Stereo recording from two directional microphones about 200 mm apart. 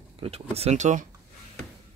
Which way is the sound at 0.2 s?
30° right (ahead or behind).